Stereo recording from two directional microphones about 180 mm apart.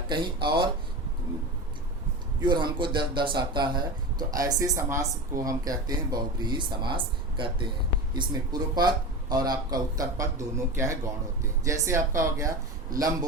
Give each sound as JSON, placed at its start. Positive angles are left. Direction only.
{"t": 0.1, "sound": "speech", "side_deg": -25}
{"t": 2.4, "sound": "speech", "side_deg": -25}